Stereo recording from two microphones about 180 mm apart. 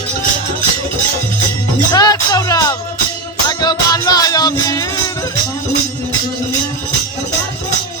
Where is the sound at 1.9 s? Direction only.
20° left (ahead or behind).